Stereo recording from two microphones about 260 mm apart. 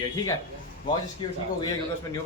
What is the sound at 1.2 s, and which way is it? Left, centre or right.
Speech, centre.